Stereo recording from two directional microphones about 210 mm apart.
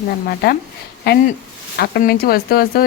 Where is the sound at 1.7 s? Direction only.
45° left (ahead or behind).